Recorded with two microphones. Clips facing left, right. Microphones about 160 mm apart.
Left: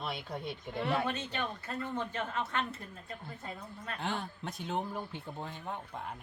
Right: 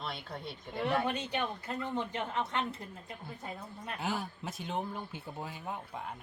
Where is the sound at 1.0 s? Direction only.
15° right (ahead or behind).